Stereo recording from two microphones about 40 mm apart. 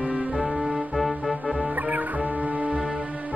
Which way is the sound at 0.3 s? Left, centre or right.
Centre.